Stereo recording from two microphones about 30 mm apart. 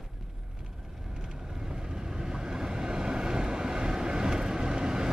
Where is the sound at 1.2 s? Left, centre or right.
Centre.